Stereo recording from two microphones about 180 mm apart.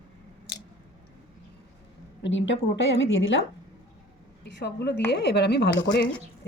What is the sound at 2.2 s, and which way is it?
A woman's voice, 90° left.